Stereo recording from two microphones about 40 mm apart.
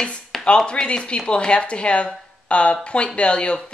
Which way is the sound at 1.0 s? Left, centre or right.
Left.